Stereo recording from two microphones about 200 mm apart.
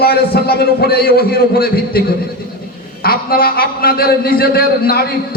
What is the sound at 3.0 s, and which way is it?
A man's voice, 50° left (ahead or behind).